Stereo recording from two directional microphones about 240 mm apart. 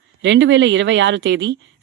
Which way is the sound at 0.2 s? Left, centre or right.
Right.